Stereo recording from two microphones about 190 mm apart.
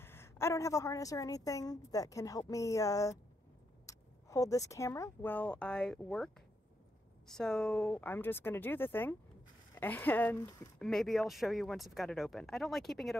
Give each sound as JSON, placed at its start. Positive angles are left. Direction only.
{"t": 0.0, "sound": "a woman's voice", "side_deg": 15}
{"t": 10.8, "sound": "speech", "side_deg": 0}